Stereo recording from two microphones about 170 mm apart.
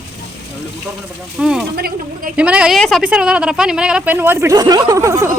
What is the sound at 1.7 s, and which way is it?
Speech, 65° right (ahead or behind).